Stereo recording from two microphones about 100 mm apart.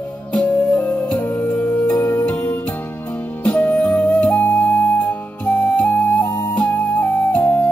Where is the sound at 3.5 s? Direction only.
15° left (ahead or behind).